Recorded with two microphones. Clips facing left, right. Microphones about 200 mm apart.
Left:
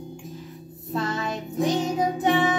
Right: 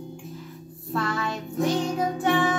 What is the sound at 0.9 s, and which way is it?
Music, 20° left (ahead or behind).